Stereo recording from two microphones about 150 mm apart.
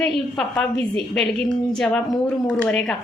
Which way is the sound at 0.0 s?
5° left (ahead or behind).